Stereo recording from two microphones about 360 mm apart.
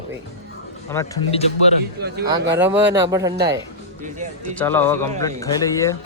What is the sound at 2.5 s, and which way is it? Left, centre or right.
Speech, centre.